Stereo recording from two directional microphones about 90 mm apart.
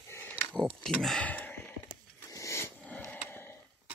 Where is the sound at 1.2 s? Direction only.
20° left (ahead or behind).